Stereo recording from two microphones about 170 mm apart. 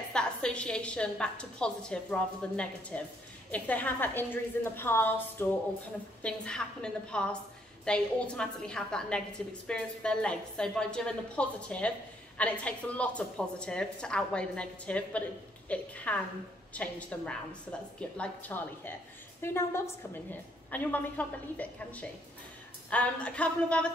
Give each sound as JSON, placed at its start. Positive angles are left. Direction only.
{"t": 0.1, "sound": "a woman's voice", "side_deg": 5}